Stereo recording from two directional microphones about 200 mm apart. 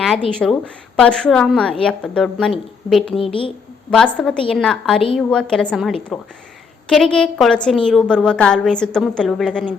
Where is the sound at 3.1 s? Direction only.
25° left (ahead or behind).